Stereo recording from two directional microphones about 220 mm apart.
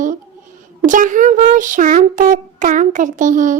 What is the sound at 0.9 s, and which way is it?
Speech, 35° right (ahead or behind).